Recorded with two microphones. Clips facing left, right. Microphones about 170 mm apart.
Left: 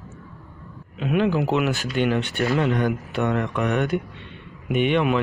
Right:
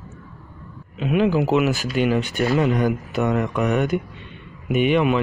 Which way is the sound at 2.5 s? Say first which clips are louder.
Right 3 dB; 10° right (ahead or behind).